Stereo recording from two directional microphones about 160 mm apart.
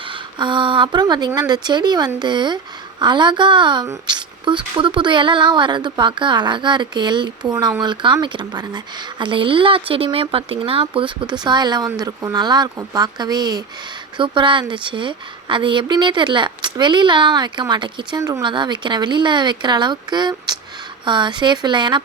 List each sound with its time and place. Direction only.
0.1 s a woman's voice: 30° right (ahead or behind)